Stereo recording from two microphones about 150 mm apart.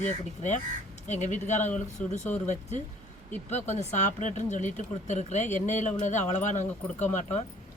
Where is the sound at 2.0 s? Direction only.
10° left (ahead or behind).